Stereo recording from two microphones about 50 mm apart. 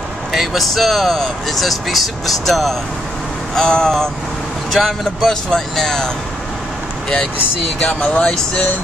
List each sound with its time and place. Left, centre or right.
0.3 s speech: centre
3.5 s speech: centre
7.8 s speech: left